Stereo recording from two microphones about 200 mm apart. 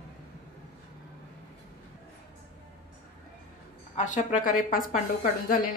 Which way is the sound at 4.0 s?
40° left (ahead or behind).